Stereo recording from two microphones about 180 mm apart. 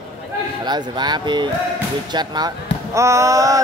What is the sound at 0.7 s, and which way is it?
Speech, 25° right (ahead or behind).